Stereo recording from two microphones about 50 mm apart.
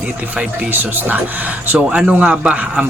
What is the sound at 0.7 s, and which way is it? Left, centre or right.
Speech, right.